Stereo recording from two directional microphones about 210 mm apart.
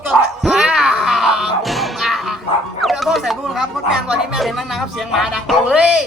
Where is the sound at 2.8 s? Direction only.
Centre (ahead or behind).